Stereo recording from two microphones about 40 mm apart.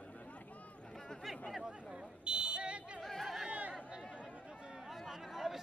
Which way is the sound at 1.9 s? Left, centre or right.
Right.